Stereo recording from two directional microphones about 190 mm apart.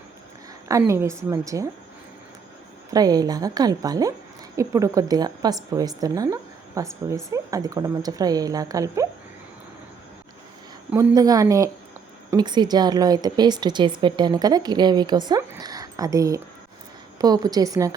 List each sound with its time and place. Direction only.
0.7 s a woman's voice: 15° right (ahead or behind)
2.9 s a woman's voice: 20° right (ahead or behind)
10.9 s a woman's voice: 20° right (ahead or behind)